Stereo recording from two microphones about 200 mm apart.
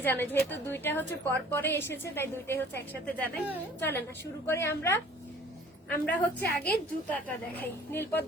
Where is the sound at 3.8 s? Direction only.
10° left (ahead or behind).